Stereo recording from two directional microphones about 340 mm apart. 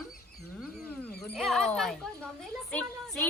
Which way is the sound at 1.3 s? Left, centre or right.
Centre.